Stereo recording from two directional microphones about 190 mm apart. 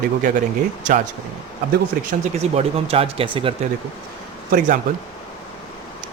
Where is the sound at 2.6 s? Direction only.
30° right (ahead or behind).